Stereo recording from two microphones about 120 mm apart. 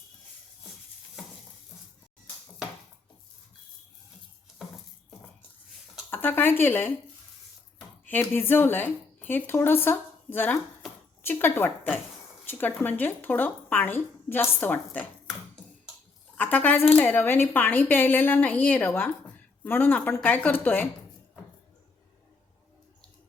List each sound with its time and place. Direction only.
6.1 s speech: 20° left (ahead or behind)
8.0 s a woman's voice: 20° left (ahead or behind)
16.4 s a woman's voice: 15° left (ahead or behind)